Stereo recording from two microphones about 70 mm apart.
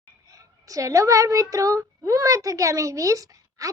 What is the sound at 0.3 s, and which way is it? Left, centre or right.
A woman's voice, right.